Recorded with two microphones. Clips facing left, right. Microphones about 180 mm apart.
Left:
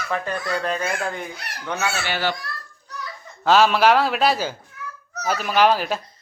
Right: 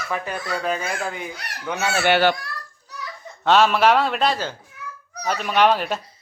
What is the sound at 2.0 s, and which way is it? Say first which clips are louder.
Speech: right 7 dB; 60° right (ahead or behind).